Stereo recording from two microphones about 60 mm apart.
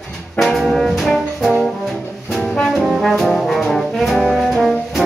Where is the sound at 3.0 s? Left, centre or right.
Centre.